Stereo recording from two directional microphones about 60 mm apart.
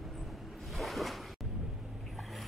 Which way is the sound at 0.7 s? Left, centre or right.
Centre.